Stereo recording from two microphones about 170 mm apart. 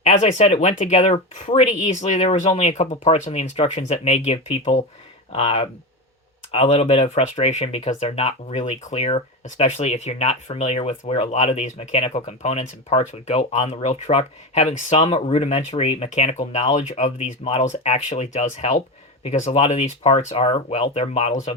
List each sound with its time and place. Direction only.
0.0 s speech: 40° left (ahead or behind)